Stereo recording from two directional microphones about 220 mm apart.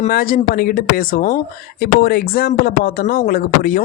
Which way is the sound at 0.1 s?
40° left (ahead or behind).